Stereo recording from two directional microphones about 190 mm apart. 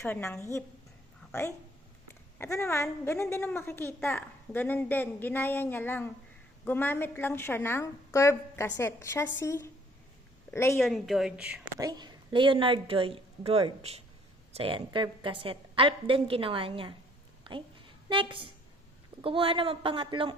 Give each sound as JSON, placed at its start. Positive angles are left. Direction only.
{"t": 0.0, "sound": "a woman's voice", "side_deg": 5}
{"t": 10.8, "sound": "a woman's voice", "side_deg": 0}
{"t": 11.8, "sound": "a woman's voice", "side_deg": -20}